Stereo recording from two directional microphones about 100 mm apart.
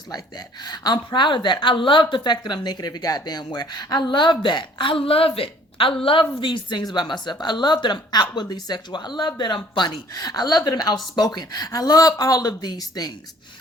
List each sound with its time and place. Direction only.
0.1 s a woman's voice: 45° left (ahead or behind); by 6.2 s 65° left (ahead or behind)
6.4 s a woman's voice: 50° left (ahead or behind)